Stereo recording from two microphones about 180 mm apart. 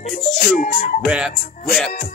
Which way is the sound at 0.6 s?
50° left (ahead or behind).